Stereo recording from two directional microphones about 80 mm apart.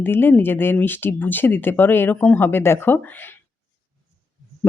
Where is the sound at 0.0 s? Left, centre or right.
Left.